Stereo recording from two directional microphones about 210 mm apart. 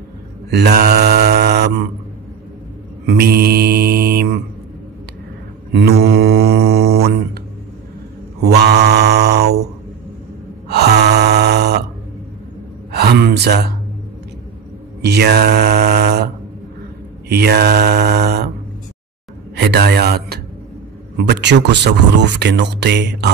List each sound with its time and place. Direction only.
0.5 s mantra: 50° right (ahead or behind)
3.1 s mantra: 45° right (ahead or behind)
5.7 s mantra: 55° right (ahead or behind)
8.4 s mantra: 50° right (ahead or behind)
10.7 s gasp: 50° right (ahead or behind)
12.9 s gasp: 50° right (ahead or behind)
15.0 s mantra: 50° right (ahead or behind)
17.3 s mantra: 50° right (ahead or behind)
19.5 s a sound: 50° right (ahead or behind)
21.2 s speech: 55° right (ahead or behind)